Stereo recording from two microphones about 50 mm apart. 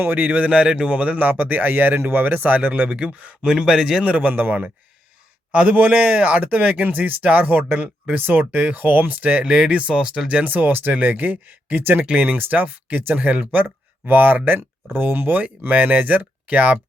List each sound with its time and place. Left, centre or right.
0.2 s a man's voice: right
1.2 s speech: right
3.4 s a man's voice: centre
4.1 s speech: right
5.5 s a man's voice: right
9.4 s a man's voice: centre
10.4 s speech: right